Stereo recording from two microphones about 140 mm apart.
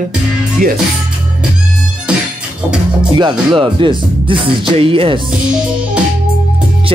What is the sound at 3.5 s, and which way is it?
Speech, 35° right (ahead or behind).